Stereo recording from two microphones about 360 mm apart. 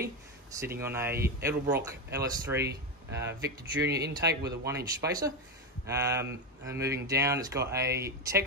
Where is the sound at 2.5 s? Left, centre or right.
Right.